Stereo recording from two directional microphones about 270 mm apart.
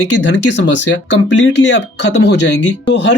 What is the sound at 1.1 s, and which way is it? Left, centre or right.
Speech, left.